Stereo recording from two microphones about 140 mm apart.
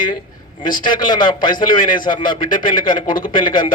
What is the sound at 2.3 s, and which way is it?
Speech, 70° left (ahead or behind).